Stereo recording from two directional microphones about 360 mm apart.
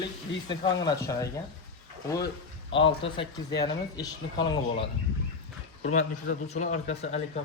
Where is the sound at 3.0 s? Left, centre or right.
Centre.